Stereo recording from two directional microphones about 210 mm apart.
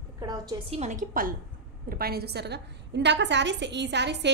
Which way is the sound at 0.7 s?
35° right (ahead or behind).